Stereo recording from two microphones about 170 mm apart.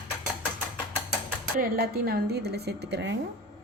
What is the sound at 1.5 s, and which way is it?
Speech, 60° right (ahead or behind).